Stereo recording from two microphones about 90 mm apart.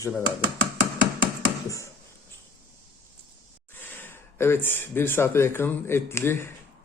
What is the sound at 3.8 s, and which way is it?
Speech, 25° left (ahead or behind).